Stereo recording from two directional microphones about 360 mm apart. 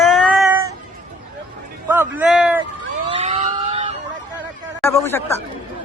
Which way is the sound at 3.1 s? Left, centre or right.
Centre.